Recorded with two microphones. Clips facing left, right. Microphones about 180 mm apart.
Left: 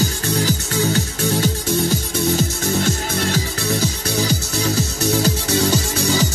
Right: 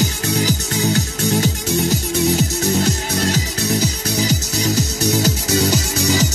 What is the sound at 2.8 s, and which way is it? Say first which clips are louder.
Music: right 2 dB; 40° right (ahead or behind).